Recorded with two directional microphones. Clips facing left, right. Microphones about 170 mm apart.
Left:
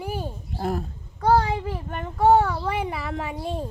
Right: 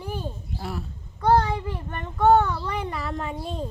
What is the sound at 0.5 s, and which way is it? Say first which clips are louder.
Speech: left 8 dB; 45° left (ahead or behind).